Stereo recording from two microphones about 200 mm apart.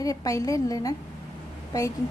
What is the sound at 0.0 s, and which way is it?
A woman's voice, 15° left (ahead or behind).